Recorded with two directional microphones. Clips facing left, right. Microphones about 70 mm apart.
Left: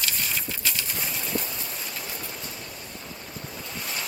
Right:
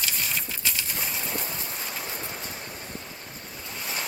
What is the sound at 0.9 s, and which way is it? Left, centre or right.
Bird, centre.